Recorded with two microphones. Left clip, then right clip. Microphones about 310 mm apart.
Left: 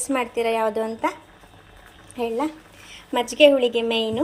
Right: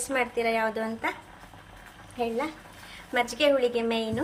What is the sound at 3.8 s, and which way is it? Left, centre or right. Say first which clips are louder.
Speech: left 6 dB; centre.